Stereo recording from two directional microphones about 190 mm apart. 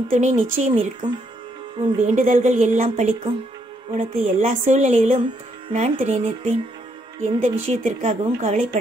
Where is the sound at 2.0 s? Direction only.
40° right (ahead or behind).